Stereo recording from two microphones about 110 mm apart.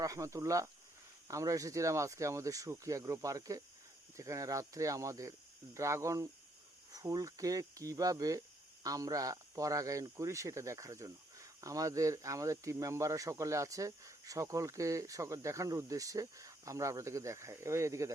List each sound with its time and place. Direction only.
0.0 s speech: 30° right (ahead or behind)